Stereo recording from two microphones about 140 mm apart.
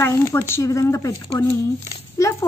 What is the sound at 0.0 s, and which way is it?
Speech, 20° left (ahead or behind).